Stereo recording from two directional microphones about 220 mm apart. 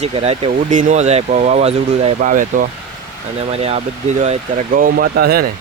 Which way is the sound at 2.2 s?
40° right (ahead or behind).